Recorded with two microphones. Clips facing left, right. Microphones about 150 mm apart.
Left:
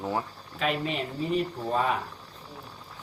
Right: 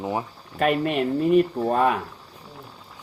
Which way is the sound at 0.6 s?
55° right (ahead or behind).